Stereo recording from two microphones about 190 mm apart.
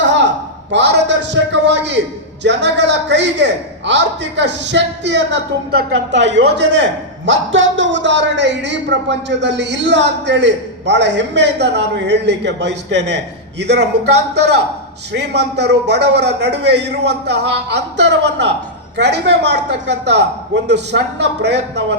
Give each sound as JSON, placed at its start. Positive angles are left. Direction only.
{"t": 0.0, "sound": "a sound", "side_deg": -70}
{"t": 0.7, "sound": "a man's voice", "side_deg": -65}
{"t": 7.3, "sound": "a man's voice", "side_deg": -80}